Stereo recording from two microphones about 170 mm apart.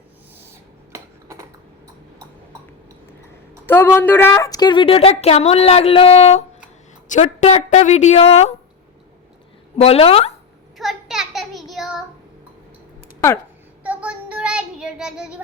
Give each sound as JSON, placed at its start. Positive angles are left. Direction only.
{"t": 0.9, "sound": "typing", "side_deg": -15}
{"t": 3.7, "sound": "a woman's voice", "side_deg": 15}
{"t": 9.7, "sound": "a woman's voice", "side_deg": 35}
{"t": 10.8, "sound": "a sound", "side_deg": 0}
{"t": 11.7, "sound": "child singing", "side_deg": 0}
{"t": 13.8, "sound": "child singing", "side_deg": -10}